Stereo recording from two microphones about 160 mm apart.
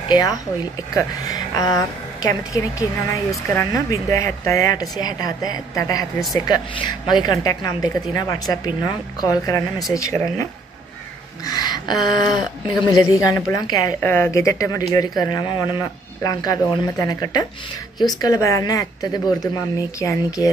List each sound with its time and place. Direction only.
0.1 s speech: 25° left (ahead or behind)
3.4 s speech: 20° left (ahead or behind)
11.4 s a sound: 25° left (ahead or behind)
12.0 s speech: 25° left (ahead or behind)